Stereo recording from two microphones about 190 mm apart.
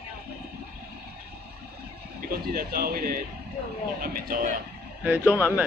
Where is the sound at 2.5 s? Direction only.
50° right (ahead or behind).